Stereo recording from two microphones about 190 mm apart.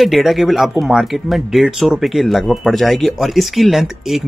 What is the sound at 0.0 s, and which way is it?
Speech, centre (ahead or behind).